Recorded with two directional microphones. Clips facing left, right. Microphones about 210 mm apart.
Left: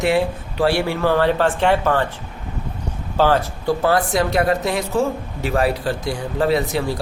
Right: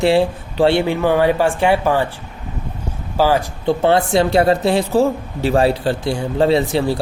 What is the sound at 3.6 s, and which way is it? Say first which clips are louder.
Speech: right 5 dB; 25° right (ahead or behind).